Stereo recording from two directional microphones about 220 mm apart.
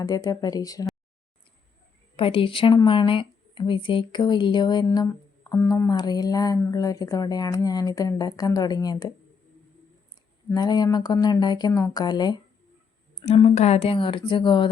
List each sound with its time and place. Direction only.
0.0 s a woman's voice: 15° left (ahead or behind)
2.1 s a woman's voice: 25° left (ahead or behind)
10.5 s speech: 20° left (ahead or behind)